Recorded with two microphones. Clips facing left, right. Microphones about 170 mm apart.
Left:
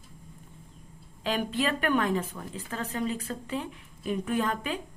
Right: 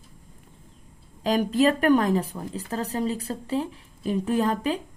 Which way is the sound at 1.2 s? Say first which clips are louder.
Right 8 dB; 40° right (ahead or behind).